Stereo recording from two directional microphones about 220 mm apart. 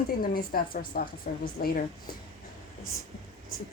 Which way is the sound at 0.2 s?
40° left (ahead or behind).